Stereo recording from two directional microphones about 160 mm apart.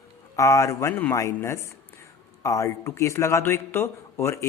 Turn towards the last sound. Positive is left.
turn(degrees=15)  # may be behind; listen again after turning